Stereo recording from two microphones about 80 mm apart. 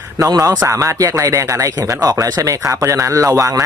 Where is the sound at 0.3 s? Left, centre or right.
Right.